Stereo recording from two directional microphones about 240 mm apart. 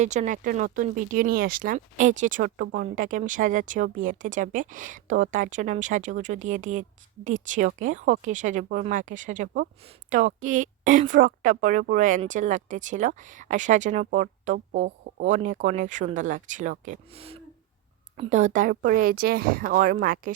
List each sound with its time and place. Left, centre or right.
0.0 s speech: right